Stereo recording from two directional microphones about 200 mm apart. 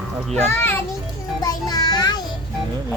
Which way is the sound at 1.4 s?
20° left (ahead or behind).